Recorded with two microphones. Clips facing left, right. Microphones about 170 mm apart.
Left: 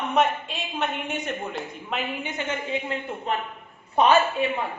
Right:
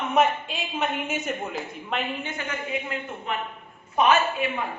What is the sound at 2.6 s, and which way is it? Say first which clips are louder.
A man's voice: left 2 dB; 30° left (ahead or behind).